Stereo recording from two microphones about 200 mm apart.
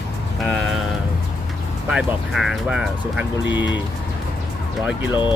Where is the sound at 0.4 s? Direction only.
5° left (ahead or behind).